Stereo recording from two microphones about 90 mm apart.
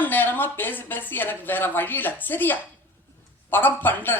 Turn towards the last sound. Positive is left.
turn(degrees=20)  # may be behind; listen again after turning